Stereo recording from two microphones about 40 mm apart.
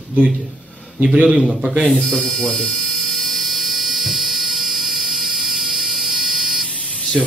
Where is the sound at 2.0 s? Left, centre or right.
Centre.